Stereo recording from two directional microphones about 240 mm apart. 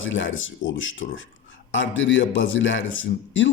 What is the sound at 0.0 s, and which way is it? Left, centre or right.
Speech, left.